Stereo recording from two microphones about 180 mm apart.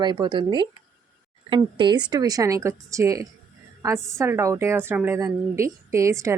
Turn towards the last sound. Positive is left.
turn(degrees=-15)  # may be behind; listen again after turning